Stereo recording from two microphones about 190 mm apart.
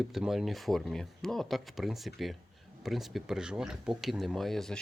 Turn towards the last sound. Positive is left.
turn(degrees=0)  # may be behind; listen again after turning